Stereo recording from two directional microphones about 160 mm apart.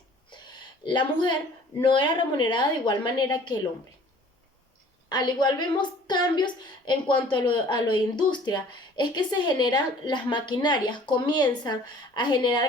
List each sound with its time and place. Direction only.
0.3 s a sound: 30° left (ahead or behind)
1.8 s a woman's voice: 30° left (ahead or behind)
5.0 s a woman's voice: 25° left (ahead or behind)